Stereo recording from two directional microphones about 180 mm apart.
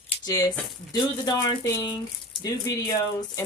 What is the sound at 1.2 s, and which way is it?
Speech, 20° left (ahead or behind).